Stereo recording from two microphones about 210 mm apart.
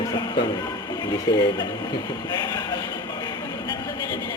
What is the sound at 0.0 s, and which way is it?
Music, 20° left (ahead or behind).